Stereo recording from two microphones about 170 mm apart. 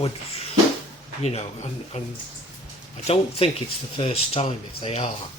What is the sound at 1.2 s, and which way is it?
Speech, 40° left (ahead or behind).